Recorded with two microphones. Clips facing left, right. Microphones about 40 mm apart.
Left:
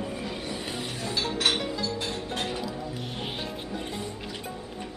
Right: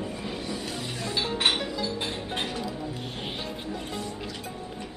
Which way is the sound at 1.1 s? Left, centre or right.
Centre.